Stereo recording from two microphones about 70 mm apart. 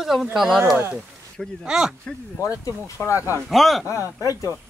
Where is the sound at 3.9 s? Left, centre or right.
Left.